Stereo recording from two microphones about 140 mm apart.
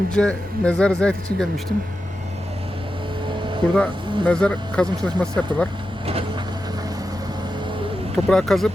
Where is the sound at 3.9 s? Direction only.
35° right (ahead or behind).